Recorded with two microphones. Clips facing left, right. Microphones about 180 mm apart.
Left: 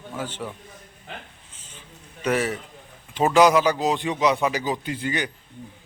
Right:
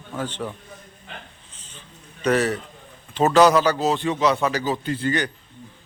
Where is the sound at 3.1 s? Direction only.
10° left (ahead or behind).